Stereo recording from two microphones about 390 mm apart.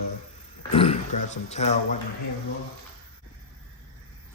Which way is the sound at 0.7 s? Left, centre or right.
Centre.